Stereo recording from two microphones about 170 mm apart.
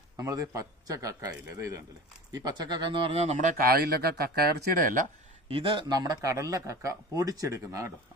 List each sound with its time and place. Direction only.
0.2 s speech: 20° right (ahead or behind)
3.3 s speech: 55° right (ahead or behind)
5.5 s speech: 30° right (ahead or behind)